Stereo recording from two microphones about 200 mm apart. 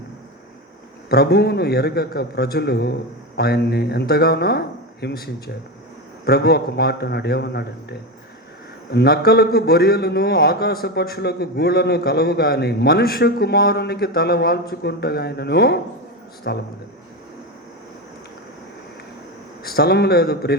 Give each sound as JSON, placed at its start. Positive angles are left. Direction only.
{"t": 1.1, "sound": "a man's voice", "side_deg": 50}
{"t": 19.6, "sound": "a man's voice", "side_deg": 50}